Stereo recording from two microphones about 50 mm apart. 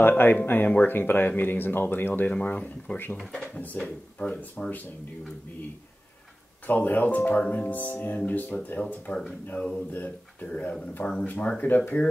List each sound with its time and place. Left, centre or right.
0.0 s speech: left
2.2 s speech: left
3.2 s speech: centre
4.6 s speech: left
6.6 s speech: left
9.8 s speech: left
10.5 s speech: left